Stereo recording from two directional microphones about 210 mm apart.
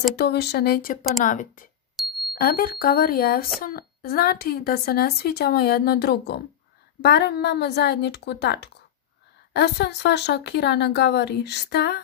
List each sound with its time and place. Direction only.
0.1 s a woman's voice: 50° left (ahead or behind)
1.2 s speech: 40° left (ahead or behind)
2.0 s bicycle bell: centre (ahead or behind)
2.3 s a woman's voice: 45° left (ahead or behind)